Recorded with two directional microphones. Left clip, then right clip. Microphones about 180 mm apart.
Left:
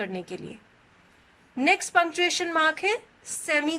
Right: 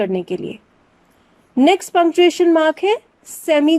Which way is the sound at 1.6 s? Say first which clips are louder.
Right 8 dB; 50° right (ahead or behind).